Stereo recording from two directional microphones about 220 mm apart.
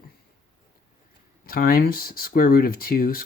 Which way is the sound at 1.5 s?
40° left (ahead or behind).